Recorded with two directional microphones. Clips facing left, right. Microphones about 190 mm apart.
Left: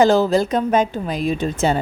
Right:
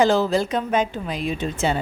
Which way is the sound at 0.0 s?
40° left (ahead or behind).